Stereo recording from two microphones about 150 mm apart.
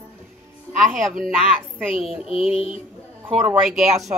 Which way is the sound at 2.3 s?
40° left (ahead or behind).